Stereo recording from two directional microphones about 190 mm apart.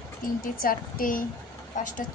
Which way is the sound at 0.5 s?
50° left (ahead or behind).